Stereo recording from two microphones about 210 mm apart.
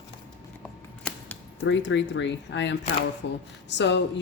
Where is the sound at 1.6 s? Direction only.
60° left (ahead or behind).